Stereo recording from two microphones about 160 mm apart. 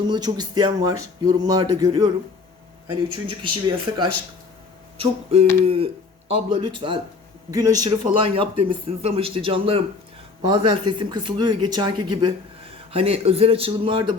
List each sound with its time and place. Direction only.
0.1 s speech: 25° right (ahead or behind)
2.9 s speech: 30° right (ahead or behind)